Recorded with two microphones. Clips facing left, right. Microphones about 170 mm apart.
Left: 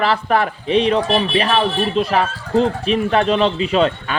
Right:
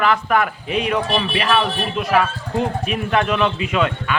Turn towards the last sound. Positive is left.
turn(degrees=30)  # may be behind; listen again after turning